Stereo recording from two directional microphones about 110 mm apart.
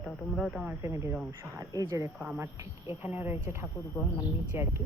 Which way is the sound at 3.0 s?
20° right (ahead or behind).